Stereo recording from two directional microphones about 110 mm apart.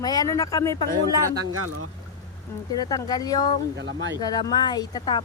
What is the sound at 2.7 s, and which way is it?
Speech, 35° left (ahead or behind).